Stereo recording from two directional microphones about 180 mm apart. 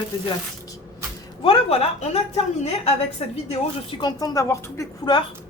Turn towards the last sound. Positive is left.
turn(degrees=20)  # may be behind; listen again after turning